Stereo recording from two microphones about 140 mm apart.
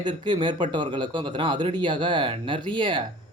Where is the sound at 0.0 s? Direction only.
35° right (ahead or behind).